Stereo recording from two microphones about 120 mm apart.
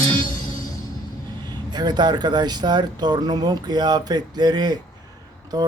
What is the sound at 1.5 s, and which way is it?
A man's voice, 35° right (ahead or behind).